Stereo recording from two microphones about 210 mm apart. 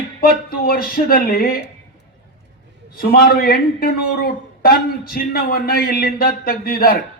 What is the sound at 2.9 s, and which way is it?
Speech, 45° left (ahead or behind).